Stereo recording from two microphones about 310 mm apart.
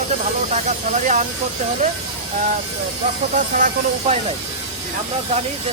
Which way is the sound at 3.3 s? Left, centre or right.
Right.